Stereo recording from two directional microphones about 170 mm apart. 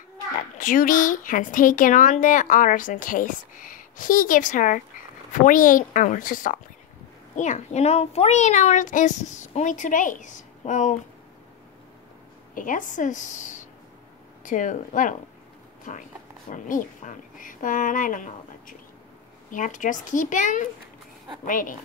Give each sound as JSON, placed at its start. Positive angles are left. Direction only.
{"t": 0.6, "sound": "speech", "side_deg": 50}
{"t": 12.5, "sound": "speech", "side_deg": 50}
{"t": 16.4, "sound": "speech", "side_deg": 50}